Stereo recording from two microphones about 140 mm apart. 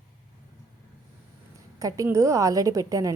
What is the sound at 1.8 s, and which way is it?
A woman's voice, 25° right (ahead or behind).